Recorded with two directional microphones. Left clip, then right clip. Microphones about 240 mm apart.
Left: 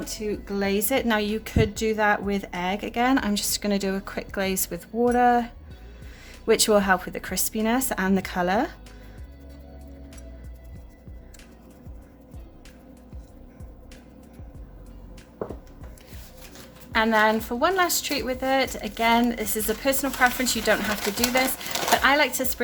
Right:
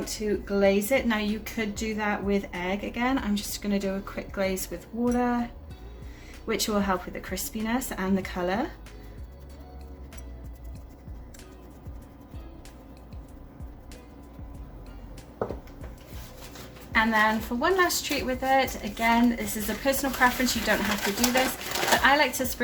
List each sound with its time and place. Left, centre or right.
0.0 s a woman's voice: left
16.9 s a woman's voice: left